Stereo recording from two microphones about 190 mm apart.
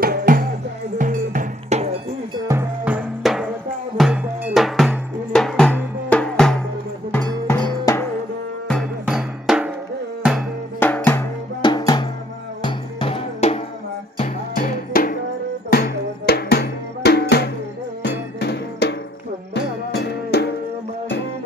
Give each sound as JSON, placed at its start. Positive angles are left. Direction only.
{"t": 0.0, "sound": "music", "side_deg": -50}
{"t": 2.4, "sound": "music", "side_deg": -10}
{"t": 7.6, "sound": "music", "side_deg": 15}
{"t": 8.6, "sound": "music", "side_deg": 0}
{"t": 10.8, "sound": "drum", "side_deg": 10}
{"t": 11.6, "sound": "drum", "side_deg": 20}
{"t": 12.6, "sound": "music", "side_deg": 30}
{"t": 14.5, "sound": "music", "side_deg": 45}